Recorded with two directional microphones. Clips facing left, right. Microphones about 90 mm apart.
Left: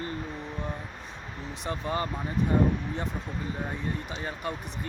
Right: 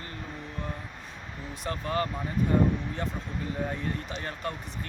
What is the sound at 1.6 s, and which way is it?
Speech, 20° left (ahead or behind).